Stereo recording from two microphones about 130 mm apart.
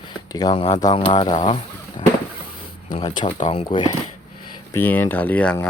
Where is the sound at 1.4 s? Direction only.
50° left (ahead or behind).